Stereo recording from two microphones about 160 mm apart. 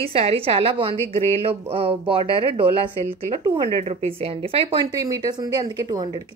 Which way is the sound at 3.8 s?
40° right (ahead or behind).